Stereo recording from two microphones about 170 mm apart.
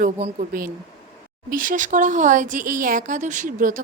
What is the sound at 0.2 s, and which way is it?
Speech, 50° right (ahead or behind).